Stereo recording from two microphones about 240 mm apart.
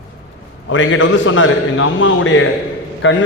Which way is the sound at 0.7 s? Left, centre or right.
Left.